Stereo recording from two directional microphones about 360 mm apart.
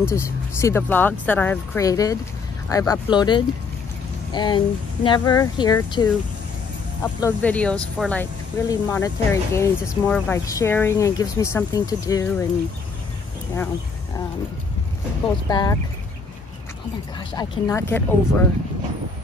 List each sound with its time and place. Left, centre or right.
0.0 s speech: centre
15.4 s speech: centre
17.4 s speech: centre